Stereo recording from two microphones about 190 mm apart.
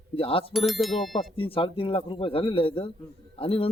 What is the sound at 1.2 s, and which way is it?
Speech, 30° left (ahead or behind).